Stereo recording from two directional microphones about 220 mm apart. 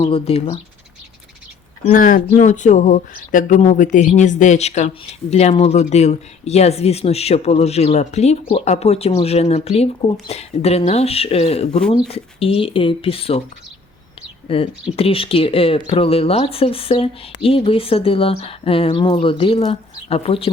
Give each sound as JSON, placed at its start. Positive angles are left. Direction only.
{"t": 0.0, "sound": "speech", "side_deg": 25}
{"t": 1.8, "sound": "speech", "side_deg": 40}